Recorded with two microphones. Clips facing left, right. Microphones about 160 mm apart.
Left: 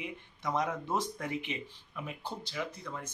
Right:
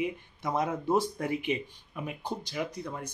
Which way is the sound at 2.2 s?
15° right (ahead or behind).